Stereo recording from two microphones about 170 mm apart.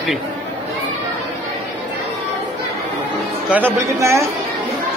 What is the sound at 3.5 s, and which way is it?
Speech, 15° right (ahead or behind).